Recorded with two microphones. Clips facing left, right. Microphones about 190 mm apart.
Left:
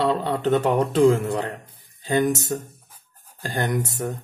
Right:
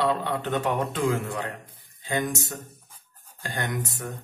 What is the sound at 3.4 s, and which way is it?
Speech, 35° left (ahead or behind).